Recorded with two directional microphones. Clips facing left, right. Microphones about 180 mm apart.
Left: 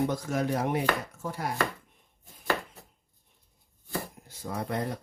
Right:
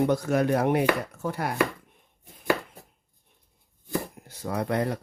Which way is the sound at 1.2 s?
65° right (ahead or behind).